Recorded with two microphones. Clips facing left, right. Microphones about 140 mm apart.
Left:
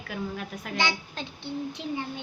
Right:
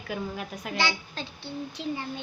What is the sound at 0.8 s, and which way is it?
A woman's voice, 20° left (ahead or behind).